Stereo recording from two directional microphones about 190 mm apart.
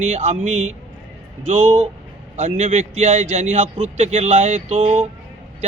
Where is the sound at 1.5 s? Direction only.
40° right (ahead or behind).